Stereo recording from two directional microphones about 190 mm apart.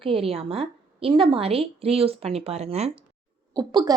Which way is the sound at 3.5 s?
20° right (ahead or behind).